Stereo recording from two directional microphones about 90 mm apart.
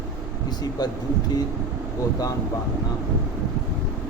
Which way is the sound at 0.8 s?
50° left (ahead or behind).